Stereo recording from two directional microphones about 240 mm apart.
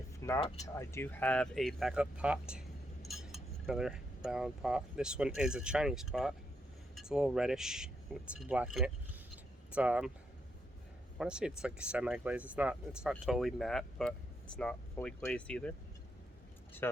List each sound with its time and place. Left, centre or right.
0.3 s speech: left
0.7 s speech: centre
3.1 s cutlery: centre
6.9 s speech: centre
11.2 s speech: centre
16.8 s speech: centre